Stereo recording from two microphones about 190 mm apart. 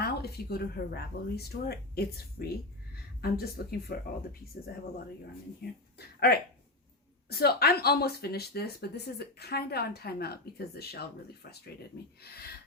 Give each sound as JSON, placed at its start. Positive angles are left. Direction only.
{"t": 0.0, "sound": "speech", "side_deg": 55}